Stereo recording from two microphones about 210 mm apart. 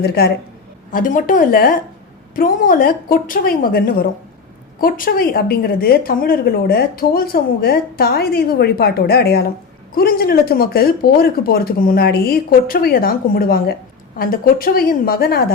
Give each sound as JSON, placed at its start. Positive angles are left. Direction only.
{"t": 0.0, "sound": "a woman's voice", "side_deg": 50}
{"t": 0.9, "sound": "a woman's voice", "side_deg": 40}